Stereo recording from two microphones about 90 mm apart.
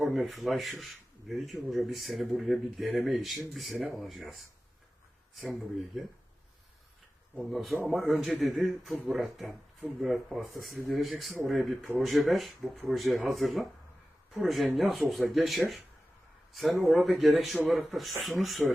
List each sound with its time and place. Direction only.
0.0 s speech: centre (ahead or behind)
7.5 s speech: centre (ahead or behind)